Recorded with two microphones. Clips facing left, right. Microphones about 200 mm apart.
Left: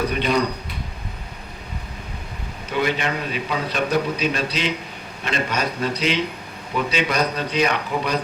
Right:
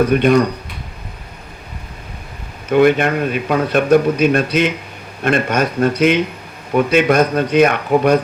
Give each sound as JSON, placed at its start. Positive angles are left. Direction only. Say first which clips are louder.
{"t": 0.0, "sound": "a man's voice", "louder": "right 9 dB", "side_deg": -50}
{"t": 2.6, "sound": "a man's voice", "louder": "right 11 dB", "side_deg": -55}